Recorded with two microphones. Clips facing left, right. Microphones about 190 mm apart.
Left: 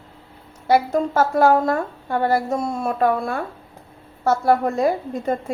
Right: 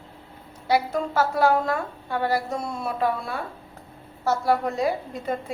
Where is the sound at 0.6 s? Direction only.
50° left (ahead or behind).